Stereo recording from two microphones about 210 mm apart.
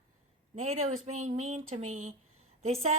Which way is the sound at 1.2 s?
35° right (ahead or behind).